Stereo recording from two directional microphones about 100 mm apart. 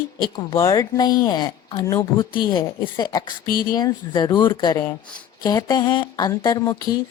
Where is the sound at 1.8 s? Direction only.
30° left (ahead or behind).